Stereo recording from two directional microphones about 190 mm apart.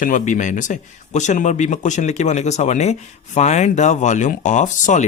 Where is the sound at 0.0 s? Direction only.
40° left (ahead or behind).